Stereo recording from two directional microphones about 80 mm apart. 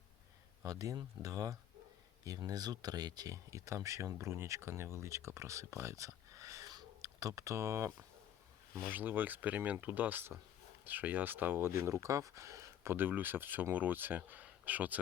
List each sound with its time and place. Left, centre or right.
0.6 s speech: right
3.3 s speech: right
12.9 s speech: right